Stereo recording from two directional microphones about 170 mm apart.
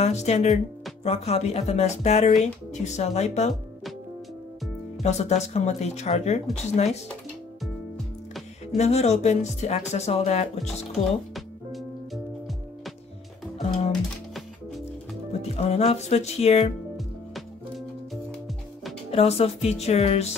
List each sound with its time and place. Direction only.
0.0 s speech: 40° left (ahead or behind)
5.0 s speech: 40° left (ahead or behind)
8.7 s speech: 40° left (ahead or behind)
10.6 s music: centre (ahead or behind)
13.6 s music: 35° left (ahead or behind)
15.4 s speech: 40° left (ahead or behind)
16.9 s music: centre (ahead or behind)
19.0 s speech: 40° left (ahead or behind)